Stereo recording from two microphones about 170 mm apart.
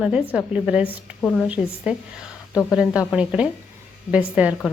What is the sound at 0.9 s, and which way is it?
Speech, 10° left (ahead or behind).